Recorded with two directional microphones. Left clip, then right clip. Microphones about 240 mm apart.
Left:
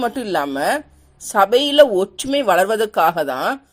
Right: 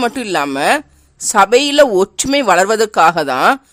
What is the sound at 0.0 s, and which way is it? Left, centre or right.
A woman's voice, right.